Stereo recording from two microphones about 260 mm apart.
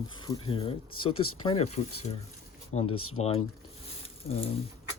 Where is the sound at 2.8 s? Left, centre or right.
Left.